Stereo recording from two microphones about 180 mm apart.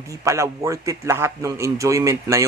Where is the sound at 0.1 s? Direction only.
15° right (ahead or behind).